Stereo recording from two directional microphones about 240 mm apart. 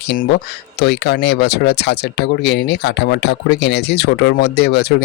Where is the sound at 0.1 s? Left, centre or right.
Left.